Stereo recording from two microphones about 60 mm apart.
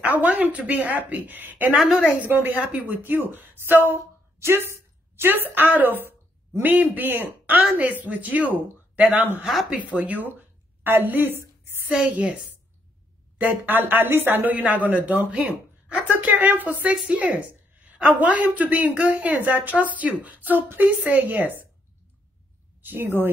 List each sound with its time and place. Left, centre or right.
0.0 s a woman's voice: right
1.8 s a woman's voice: centre
2.1 s a woman's voice: right
11.9 s a woman's voice: centre
13.4 s a woman's voice: right
22.8 s speech: right